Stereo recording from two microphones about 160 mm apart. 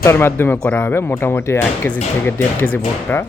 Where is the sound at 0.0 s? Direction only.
15° left (ahead or behind).